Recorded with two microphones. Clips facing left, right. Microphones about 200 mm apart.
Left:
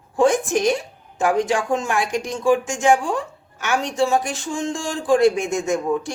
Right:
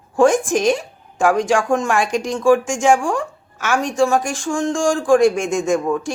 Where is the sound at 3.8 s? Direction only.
Centre (ahead or behind).